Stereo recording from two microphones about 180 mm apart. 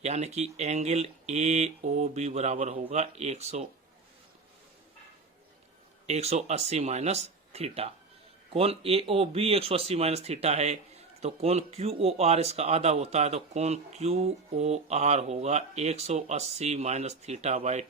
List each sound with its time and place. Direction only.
0.0 s speech: 40° right (ahead or behind)
6.1 s speech: 35° right (ahead or behind)